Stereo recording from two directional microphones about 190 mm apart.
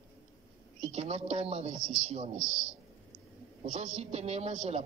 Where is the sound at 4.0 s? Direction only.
35° right (ahead or behind).